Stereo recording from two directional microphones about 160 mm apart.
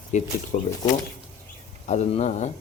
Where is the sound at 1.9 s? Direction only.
45° left (ahead or behind).